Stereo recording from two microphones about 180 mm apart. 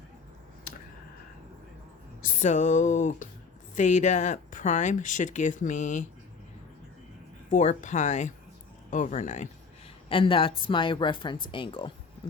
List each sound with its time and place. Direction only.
2.2 s speech: 45° left (ahead or behind)
7.5 s speech: 40° left (ahead or behind)
10.1 s speech: 30° left (ahead or behind)